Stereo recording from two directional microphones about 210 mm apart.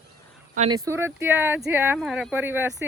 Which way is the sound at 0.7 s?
15° right (ahead or behind).